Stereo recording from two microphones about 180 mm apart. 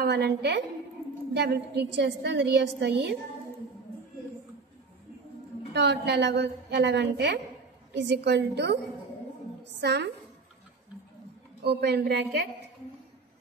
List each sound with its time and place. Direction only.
0.0 s a woman's voice: 70° right (ahead or behind)
5.7 s a woman's voice: 70° right (ahead or behind)
11.6 s a woman's voice: 65° right (ahead or behind)